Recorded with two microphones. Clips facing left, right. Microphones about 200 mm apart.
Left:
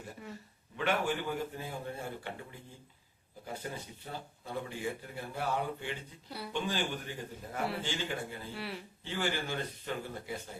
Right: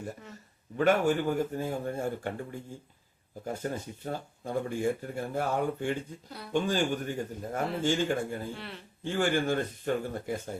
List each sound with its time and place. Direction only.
0.8 s speech: 45° right (ahead or behind)
8.5 s speech: 5° left (ahead or behind)
9.0 s speech: 50° right (ahead or behind)